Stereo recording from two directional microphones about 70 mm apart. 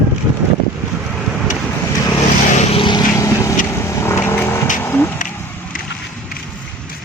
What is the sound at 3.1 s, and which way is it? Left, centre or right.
Vehicle, left.